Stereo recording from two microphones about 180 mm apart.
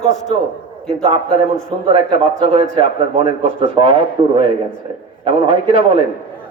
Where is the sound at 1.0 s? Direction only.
35° right (ahead or behind).